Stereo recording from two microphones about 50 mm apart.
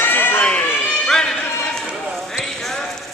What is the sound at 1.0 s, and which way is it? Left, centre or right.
Music, centre.